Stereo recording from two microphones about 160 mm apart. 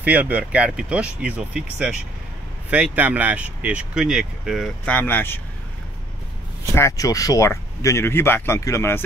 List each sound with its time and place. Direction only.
0.0 s speech: 10° right (ahead or behind)
4.8 s speech: 10° left (ahead or behind)
6.7 s speech: 20° left (ahead or behind)